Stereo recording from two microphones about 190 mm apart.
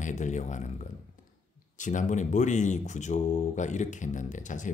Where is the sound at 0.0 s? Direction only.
40° left (ahead or behind).